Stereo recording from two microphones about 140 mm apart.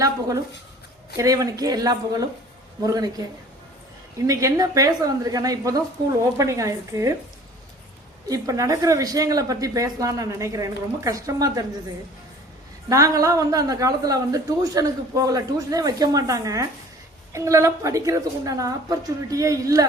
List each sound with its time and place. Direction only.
0.0 s a woman's voice: 25° right (ahead or behind)
8.3 s a woman's voice: 25° right (ahead or behind)
12.9 s a woman's voice: 25° right (ahead or behind)